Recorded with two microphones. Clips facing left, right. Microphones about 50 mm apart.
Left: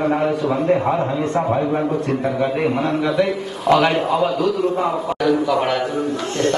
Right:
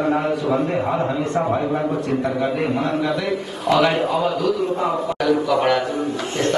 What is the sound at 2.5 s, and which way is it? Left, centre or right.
A man's voice, centre.